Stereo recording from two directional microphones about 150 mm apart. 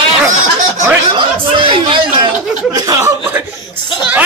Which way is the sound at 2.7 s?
25° right (ahead or behind).